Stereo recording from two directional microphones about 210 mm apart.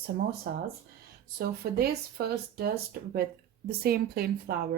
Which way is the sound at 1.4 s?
45° right (ahead or behind).